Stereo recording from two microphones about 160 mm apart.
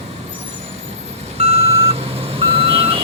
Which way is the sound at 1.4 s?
40° right (ahead or behind).